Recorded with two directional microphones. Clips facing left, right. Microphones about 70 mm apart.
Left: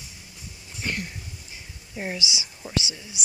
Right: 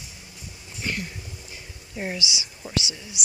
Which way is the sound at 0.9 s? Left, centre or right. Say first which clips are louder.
Even; left.